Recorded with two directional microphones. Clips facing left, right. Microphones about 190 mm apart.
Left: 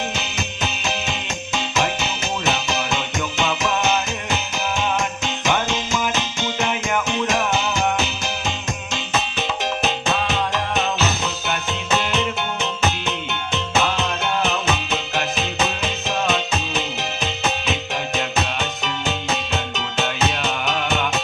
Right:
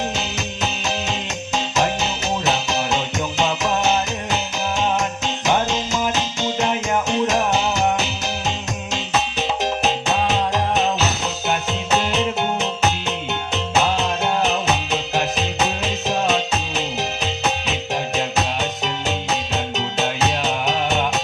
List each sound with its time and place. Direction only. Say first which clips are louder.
1.5 s music: right 2 dB; 40° right (ahead or behind)
9.8 s music: right 1 dB; 40° right (ahead or behind)
11.9 s music: right 3 dB; 40° right (ahead or behind)
19.7 s music: right 2 dB; 40° right (ahead or behind)